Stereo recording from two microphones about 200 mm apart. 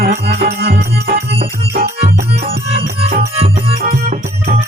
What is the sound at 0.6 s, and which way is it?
Music, 50° right (ahead or behind).